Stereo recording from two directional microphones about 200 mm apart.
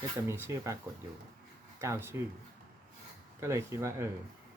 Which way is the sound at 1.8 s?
15° right (ahead or behind).